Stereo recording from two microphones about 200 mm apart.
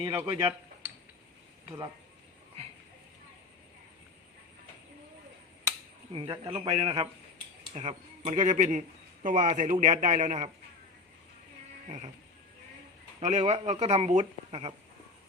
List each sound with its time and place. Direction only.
0.0 s speech: 15° right (ahead or behind)
6.1 s a man's voice: 25° right (ahead or behind)
11.9 s speech: 35° right (ahead or behind)
13.1 s speech: 35° right (ahead or behind)